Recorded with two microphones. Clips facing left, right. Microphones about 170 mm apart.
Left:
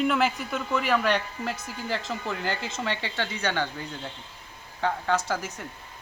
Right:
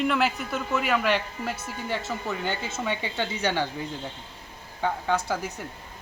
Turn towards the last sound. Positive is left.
turn(degrees=-10)  # may be behind; listen again after turning